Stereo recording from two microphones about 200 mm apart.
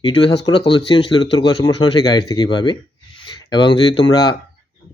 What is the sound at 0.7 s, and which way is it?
Speech, 25° left (ahead or behind).